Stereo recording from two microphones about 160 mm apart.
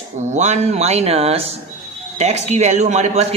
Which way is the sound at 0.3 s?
45° right (ahead or behind).